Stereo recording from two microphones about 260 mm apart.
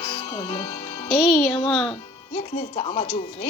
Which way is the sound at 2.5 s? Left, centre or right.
Left.